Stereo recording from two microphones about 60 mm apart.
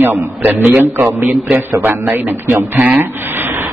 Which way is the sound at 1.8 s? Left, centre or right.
Right.